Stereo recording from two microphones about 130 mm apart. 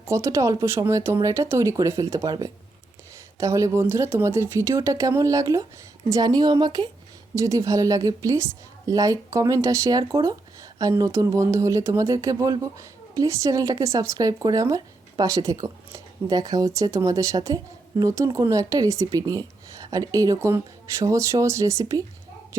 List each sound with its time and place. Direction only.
0.1 s a woman's voice: 25° right (ahead or behind)